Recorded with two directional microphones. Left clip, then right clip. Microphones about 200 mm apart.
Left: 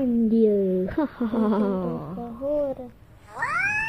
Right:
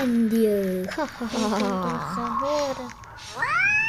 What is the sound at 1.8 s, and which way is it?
Speech, 25° right (ahead or behind).